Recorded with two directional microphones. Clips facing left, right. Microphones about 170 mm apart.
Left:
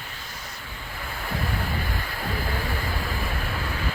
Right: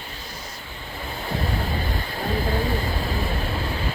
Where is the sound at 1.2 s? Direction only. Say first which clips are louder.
Right 3 dB; 25° right (ahead or behind).